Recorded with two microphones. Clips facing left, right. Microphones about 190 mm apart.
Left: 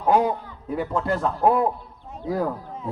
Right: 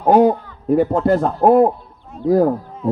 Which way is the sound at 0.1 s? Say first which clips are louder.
Right 8 dB; 45° right (ahead or behind).